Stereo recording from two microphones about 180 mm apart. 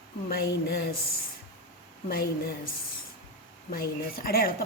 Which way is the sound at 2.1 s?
60° left (ahead or behind).